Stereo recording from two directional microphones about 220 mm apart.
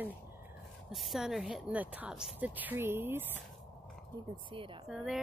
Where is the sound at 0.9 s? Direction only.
Centre (ahead or behind).